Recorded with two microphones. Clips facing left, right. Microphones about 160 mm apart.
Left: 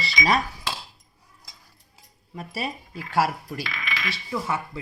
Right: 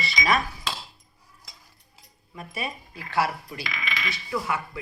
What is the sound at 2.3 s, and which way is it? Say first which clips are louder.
Speech: left 2 dB; 35° left (ahead or behind).